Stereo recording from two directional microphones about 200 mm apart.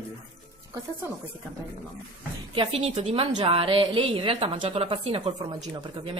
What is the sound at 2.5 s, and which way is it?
A woman's voice, 30° right (ahead or behind).